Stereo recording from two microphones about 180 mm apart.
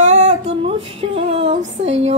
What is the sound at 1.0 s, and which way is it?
Speech, 35° right (ahead or behind).